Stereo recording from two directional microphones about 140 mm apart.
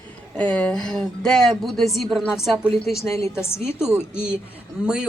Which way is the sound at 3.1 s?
20° left (ahead or behind).